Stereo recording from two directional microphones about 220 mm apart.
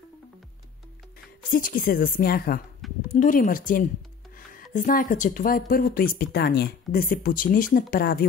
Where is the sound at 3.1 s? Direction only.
35° left (ahead or behind).